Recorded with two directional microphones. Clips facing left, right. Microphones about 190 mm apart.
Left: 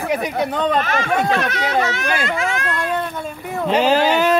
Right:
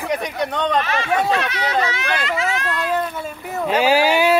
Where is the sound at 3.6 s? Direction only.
10° right (ahead or behind).